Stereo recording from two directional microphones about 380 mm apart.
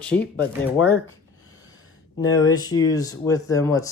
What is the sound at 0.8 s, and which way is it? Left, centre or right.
Speech, left.